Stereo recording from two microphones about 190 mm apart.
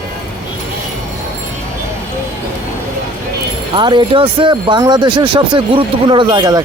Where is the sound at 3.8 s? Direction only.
25° right (ahead or behind).